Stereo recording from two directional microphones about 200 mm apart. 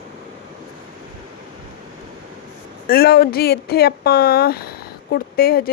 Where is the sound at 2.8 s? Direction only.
50° left (ahead or behind).